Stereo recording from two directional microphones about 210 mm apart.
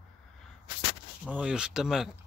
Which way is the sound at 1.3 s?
5° right (ahead or behind).